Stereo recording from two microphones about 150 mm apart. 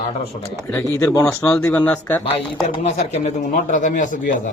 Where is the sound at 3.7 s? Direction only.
55° left (ahead or behind).